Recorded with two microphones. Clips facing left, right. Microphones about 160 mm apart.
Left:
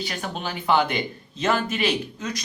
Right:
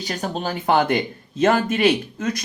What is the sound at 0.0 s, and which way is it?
A woman's voice, 40° right (ahead or behind).